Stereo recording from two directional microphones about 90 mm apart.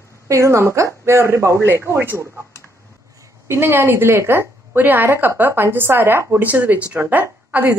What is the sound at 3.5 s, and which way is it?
A woman's voice, 25° right (ahead or behind).